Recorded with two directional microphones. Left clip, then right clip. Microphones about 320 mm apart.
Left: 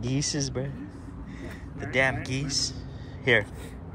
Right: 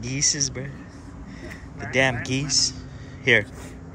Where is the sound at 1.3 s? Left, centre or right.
Centre.